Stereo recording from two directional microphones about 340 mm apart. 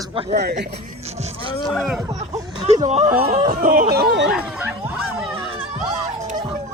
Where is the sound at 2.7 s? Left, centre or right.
Centre.